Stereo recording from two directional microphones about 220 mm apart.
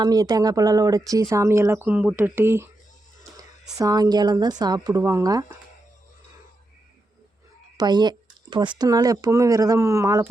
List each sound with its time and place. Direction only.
0.0 s speech: 15° right (ahead or behind)
7.8 s speech: 20° right (ahead or behind)